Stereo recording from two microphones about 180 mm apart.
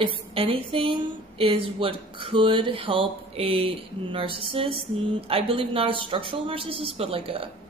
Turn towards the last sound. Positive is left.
turn(degrees=-30)  # may be behind; listen again after turning